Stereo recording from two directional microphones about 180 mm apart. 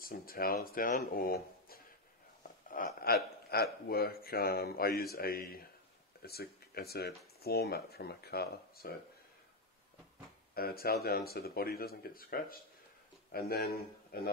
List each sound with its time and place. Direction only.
0.0 s speech: 55° left (ahead or behind)
2.7 s a sound: 55° left (ahead or behind)
3.5 s speech: 60° left (ahead or behind)
10.5 s speech: 55° left (ahead or behind)